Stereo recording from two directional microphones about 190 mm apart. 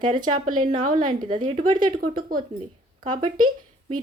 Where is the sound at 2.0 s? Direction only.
50° right (ahead or behind).